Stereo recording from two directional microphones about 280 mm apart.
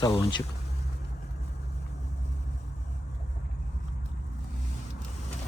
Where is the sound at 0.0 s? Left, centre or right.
Centre.